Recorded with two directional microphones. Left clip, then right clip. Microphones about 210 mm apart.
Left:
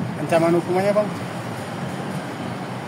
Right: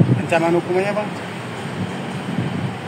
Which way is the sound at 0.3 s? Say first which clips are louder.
Even; 35° left (ahead or behind).